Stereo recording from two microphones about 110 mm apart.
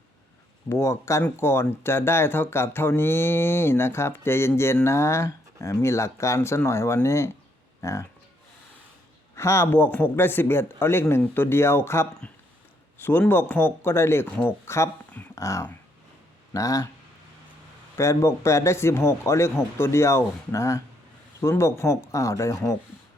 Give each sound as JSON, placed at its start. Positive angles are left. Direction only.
{"t": 0.7, "sound": "speech", "side_deg": 25}
{"t": 9.3, "sound": "speech", "side_deg": 25}
{"t": 13.1, "sound": "speech", "side_deg": 20}
{"t": 17.9, "sound": "speech", "side_deg": 25}